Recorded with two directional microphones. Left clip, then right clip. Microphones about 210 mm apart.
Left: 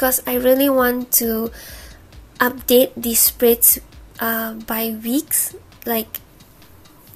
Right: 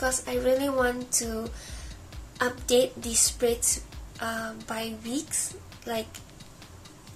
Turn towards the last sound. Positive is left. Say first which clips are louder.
# left 9 dB
turn(degrees=45)  # may be behind; listen again after turning